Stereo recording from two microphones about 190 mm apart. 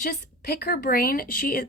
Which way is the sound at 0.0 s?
55° left (ahead or behind).